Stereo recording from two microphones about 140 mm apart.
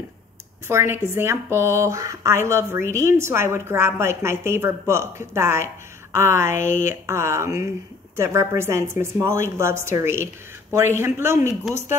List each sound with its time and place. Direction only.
0.7 s a woman's voice: 20° right (ahead or behind)
6.5 s speech: 65° left (ahead or behind)
6.9 s a woman's voice: 20° right (ahead or behind)